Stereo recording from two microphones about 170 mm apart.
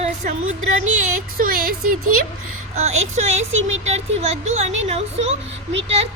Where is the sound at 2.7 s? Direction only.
40° right (ahead or behind).